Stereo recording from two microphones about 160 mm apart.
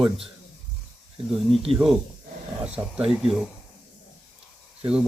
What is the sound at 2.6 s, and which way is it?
Speech, 5° right (ahead or behind).